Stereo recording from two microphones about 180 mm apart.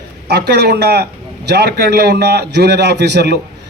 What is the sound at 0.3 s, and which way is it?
A man's voice, 65° right (ahead or behind).